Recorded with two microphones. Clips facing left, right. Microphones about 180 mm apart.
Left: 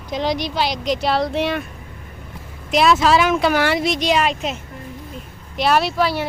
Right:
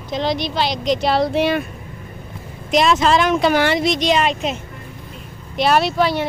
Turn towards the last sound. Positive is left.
turn(degrees=5)  # may be behind; listen again after turning